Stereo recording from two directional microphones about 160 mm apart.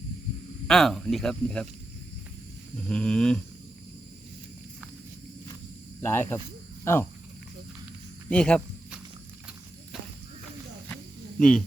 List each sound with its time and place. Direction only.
0.7 s speech: centre (ahead or behind)
2.7 s speech: 5° left (ahead or behind)
6.0 s speech: 15° left (ahead or behind)
6.8 s cricket: 15° left (ahead or behind)
8.3 s speech: 5° left (ahead or behind)
10.8 s cricket: 5° left (ahead or behind)